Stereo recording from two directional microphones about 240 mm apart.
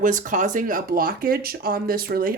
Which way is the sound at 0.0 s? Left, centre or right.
Right.